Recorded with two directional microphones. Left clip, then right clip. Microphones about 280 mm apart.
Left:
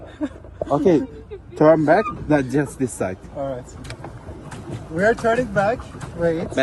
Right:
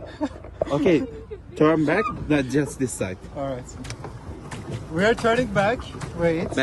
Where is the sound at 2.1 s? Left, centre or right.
Centre.